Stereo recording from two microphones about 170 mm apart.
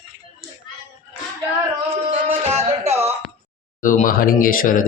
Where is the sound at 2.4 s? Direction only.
40° right (ahead or behind).